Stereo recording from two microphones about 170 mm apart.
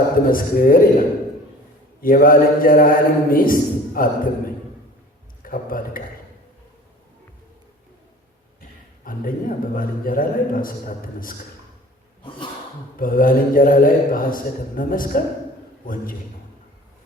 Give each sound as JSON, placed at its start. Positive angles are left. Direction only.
{"t": 0.3, "sound": "a man's voice", "side_deg": 55}
{"t": 5.4, "sound": "a man's voice", "side_deg": 55}
{"t": 9.0, "sound": "a man's voice", "side_deg": 55}
{"t": 13.0, "sound": "a man's voice", "side_deg": 55}